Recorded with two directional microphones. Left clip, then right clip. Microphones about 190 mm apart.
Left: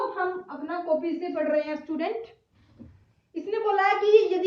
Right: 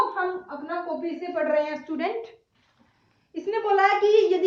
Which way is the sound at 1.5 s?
20° right (ahead or behind).